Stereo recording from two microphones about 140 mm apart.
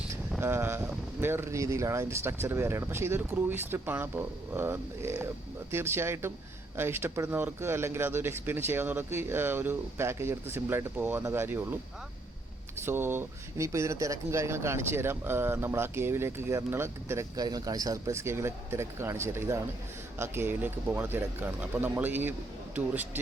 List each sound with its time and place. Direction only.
0.3 s speech: 15° right (ahead or behind)
12.8 s speech: 15° right (ahead or behind)